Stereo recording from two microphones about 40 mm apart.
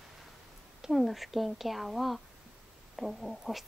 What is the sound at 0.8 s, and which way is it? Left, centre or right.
A woman's voice, centre.